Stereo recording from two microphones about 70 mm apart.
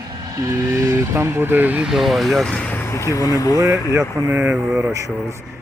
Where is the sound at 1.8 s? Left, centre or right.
Centre.